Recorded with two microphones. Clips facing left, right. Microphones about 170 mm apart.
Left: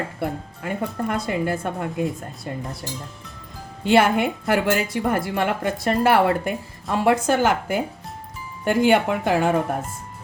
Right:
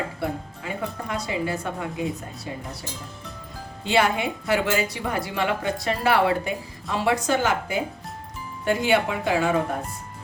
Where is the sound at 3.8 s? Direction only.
50° left (ahead or behind).